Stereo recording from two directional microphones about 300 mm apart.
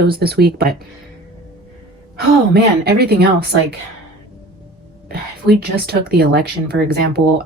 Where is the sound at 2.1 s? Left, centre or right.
Right.